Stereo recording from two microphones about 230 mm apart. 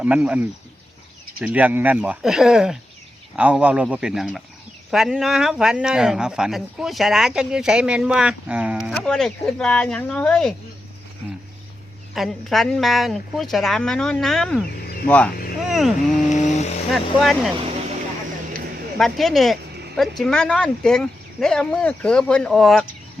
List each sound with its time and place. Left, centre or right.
0.0 s speech: centre
12.1 s speech: centre
14.8 s a sound: left
15.0 s speech: centre
16.3 s speech: left
16.9 s speech: centre
18.9 s speech: centre